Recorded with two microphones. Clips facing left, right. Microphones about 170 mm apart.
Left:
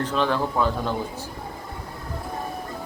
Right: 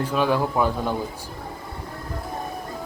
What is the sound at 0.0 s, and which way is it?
Speech, 10° right (ahead or behind).